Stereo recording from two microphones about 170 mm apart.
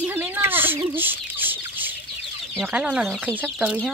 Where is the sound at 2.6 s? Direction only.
5° right (ahead or behind).